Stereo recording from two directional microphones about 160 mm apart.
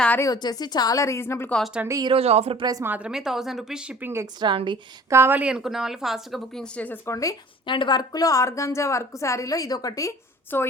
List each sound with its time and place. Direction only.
0.0 s a woman's voice: 10° left (ahead or behind)
0.3 s a woman's voice: 25° left (ahead or behind)
1.5 s speech: centre (ahead or behind)
1.8 s a woman's voice: 20° right (ahead or behind)
2.0 s speech: 40° right (ahead or behind)
2.6 s a woman's voice: 20° right (ahead or behind)
2.9 s speech: 5° right (ahead or behind)
4.4 s a woman's voice: 30° right (ahead or behind)
5.0 s speech: 15° right (ahead or behind); by 10.7 s 15° left (ahead or behind)